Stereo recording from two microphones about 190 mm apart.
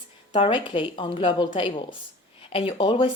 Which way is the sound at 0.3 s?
30° left (ahead or behind).